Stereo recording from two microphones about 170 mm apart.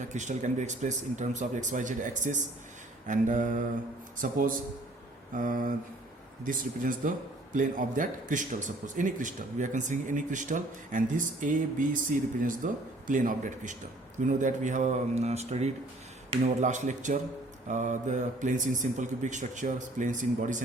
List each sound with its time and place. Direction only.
0.1 s speech: 45° right (ahead or behind)